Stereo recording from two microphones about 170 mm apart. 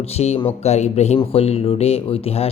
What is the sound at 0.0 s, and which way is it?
Speech, 40° left (ahead or behind).